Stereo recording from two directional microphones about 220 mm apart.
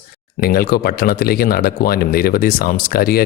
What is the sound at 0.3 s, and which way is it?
Speech, 40° left (ahead or behind).